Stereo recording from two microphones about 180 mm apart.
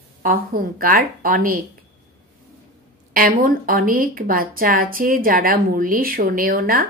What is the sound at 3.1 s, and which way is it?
A woman's voice, 50° right (ahead or behind).